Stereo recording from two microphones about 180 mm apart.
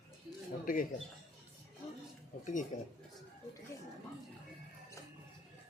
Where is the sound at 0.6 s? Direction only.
50° left (ahead or behind).